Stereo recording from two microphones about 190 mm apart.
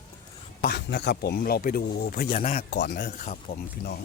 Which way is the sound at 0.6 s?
60° left (ahead or behind).